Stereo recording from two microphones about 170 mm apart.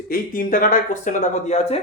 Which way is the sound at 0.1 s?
55° left (ahead or behind).